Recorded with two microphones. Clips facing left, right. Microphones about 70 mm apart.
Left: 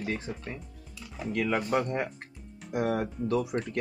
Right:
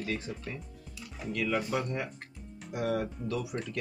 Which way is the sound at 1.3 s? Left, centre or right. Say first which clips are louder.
Left 3 dB; left.